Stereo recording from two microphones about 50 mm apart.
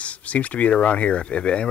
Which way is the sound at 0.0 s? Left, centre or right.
Left.